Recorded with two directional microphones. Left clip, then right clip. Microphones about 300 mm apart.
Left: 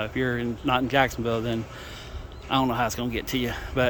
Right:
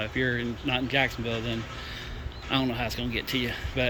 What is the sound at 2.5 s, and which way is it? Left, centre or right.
Speech, centre.